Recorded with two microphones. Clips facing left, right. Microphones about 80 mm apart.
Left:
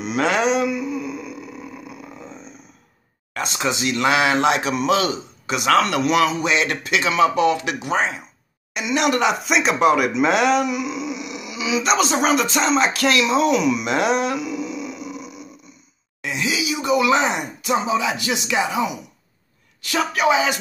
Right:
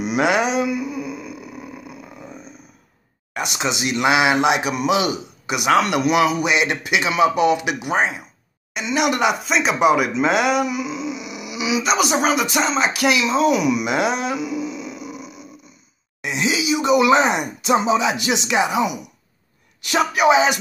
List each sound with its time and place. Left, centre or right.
0.0 s a sound: centre
2.2 s grunt: centre
3.3 s speech: centre
8.7 s speech: centre
12.2 s a sound: centre
12.9 s speech: centre
16.2 s speech: right
19.8 s speech: centre